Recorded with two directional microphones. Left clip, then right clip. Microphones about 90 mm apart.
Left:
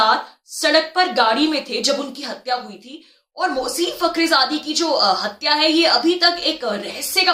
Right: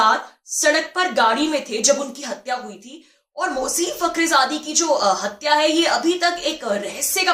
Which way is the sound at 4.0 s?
20° left (ahead or behind).